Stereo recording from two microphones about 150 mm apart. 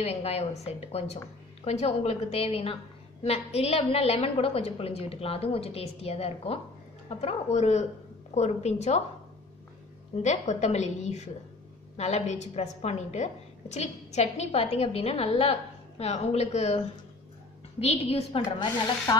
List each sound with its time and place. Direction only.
0.0 s a woman's voice: 45° left (ahead or behind)
10.1 s a woman's voice: 50° left (ahead or behind)
19.1 s music: 25° left (ahead or behind)